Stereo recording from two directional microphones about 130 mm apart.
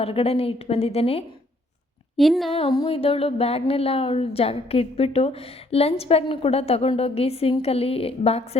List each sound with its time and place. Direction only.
0.0 s music: 50° left (ahead or behind)
2.1 s speech: centre (ahead or behind)
2.5 s music: 45° left (ahead or behind)